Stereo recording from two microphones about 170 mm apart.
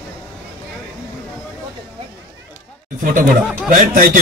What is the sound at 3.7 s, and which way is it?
Speech, 55° right (ahead or behind).